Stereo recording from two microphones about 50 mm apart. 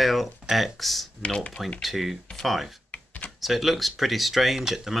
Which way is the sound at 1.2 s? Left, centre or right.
Left.